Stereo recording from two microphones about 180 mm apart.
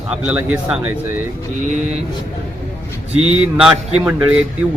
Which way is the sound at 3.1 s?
35° right (ahead or behind).